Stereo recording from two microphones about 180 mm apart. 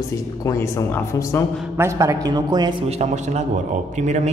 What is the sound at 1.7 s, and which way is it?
A man's voice, 15° right (ahead or behind).